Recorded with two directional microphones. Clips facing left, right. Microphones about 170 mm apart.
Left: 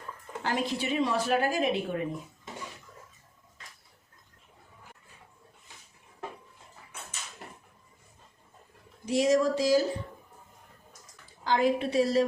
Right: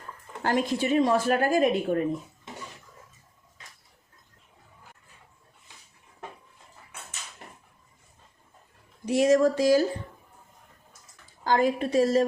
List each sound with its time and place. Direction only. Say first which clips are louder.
0.4 s a woman's voice: right 5 dB; 45° right (ahead or behind)
9.0 s speech: right 4 dB; 55° right (ahead or behind)
11.4 s a woman's voice: right 2 dB; 45° right (ahead or behind)